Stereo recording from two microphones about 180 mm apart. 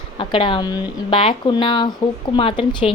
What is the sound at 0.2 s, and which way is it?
A woman's voice, 30° left (ahead or behind).